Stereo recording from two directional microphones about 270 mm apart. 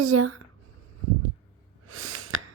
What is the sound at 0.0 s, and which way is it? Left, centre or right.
Speech, right.